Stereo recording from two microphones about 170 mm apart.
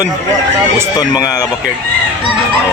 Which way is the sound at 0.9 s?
25° left (ahead or behind).